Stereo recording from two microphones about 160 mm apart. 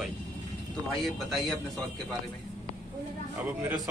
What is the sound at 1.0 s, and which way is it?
Speech, centre (ahead or behind).